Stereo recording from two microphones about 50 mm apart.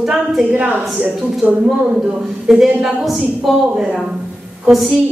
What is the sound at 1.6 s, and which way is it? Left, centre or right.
A woman's voice, centre.